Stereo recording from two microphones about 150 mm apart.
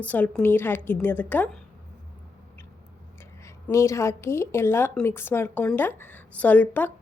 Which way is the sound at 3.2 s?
20° left (ahead or behind).